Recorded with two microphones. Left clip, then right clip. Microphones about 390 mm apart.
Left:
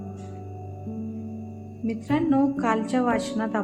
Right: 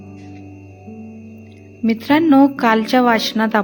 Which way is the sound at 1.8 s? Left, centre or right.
Centre.